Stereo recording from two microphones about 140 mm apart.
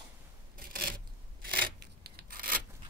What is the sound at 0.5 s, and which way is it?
Filing, 90° right.